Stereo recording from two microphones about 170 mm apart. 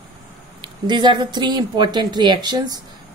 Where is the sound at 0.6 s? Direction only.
25° right (ahead or behind).